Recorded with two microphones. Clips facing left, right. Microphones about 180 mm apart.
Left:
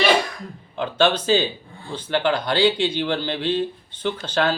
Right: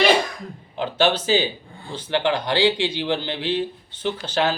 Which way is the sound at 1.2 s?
15° right (ahead or behind).